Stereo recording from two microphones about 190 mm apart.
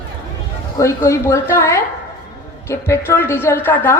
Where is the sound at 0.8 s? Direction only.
15° left (ahead or behind).